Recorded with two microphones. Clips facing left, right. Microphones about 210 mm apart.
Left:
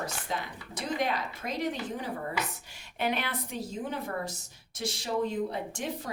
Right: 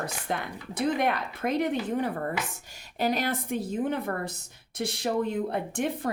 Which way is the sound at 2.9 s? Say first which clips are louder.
Right 4 dB; 40° right (ahead or behind).